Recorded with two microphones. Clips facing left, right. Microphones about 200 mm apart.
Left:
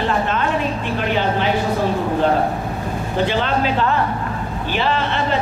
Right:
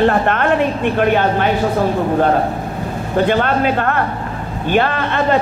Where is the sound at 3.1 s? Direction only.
55° right (ahead or behind).